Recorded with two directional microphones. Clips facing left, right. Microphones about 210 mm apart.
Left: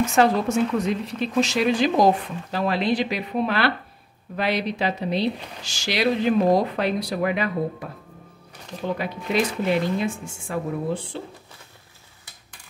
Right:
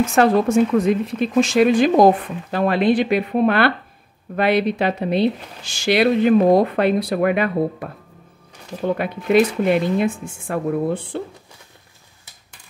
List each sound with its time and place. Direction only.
0.2 s speech: 55° right (ahead or behind)